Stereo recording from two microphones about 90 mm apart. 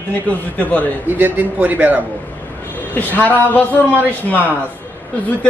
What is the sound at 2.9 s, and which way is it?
Speech, 20° left (ahead or behind).